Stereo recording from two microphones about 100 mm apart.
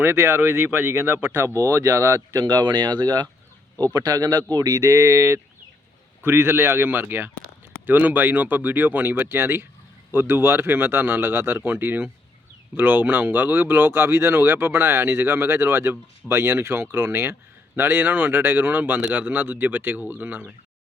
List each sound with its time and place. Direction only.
0.0 s speech: 20° right (ahead or behind)